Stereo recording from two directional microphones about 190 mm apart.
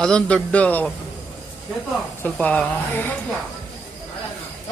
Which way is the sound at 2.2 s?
5° left (ahead or behind).